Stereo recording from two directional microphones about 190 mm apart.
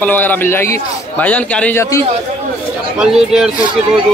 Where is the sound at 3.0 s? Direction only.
Centre (ahead or behind).